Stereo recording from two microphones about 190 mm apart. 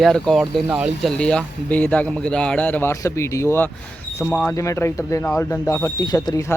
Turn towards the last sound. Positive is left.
turn(degrees=15)  # may be behind; listen again after turning